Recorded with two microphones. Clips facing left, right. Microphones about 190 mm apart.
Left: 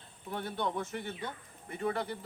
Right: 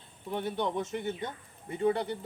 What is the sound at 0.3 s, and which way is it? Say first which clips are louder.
Speech: right 4 dB; 15° right (ahead or behind).